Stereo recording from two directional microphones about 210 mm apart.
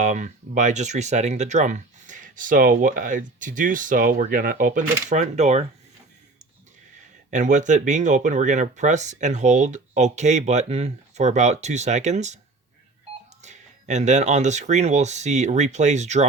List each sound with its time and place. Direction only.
0.0 s speech: 35° right (ahead or behind)
7.3 s speech: 35° right (ahead or behind)
13.4 s speech: 35° right (ahead or behind)